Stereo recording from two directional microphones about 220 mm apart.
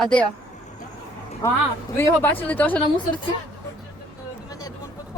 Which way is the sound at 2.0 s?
10° left (ahead or behind).